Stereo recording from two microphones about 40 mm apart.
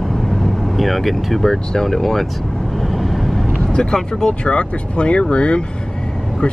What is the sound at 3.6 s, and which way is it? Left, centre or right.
Speech, left.